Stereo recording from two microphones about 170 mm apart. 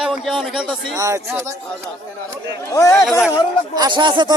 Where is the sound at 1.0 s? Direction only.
20° right (ahead or behind).